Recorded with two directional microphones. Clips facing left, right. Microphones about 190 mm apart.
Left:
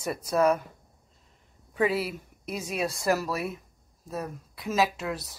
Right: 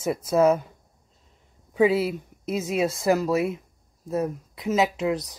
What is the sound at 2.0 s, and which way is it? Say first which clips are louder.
Speech: right 7 dB; 25° right (ahead or behind).